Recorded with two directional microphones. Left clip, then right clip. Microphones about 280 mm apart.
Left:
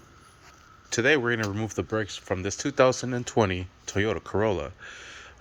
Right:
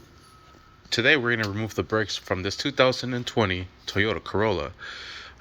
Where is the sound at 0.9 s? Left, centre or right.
Centre.